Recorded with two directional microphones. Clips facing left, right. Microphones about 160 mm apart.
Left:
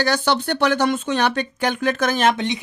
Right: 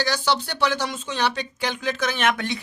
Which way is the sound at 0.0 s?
55° left (ahead or behind).